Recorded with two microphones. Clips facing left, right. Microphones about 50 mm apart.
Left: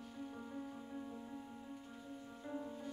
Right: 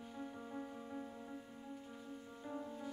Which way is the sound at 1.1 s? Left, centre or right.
Centre.